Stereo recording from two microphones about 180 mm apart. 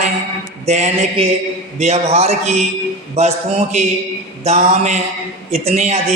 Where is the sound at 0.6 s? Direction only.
35° right (ahead or behind).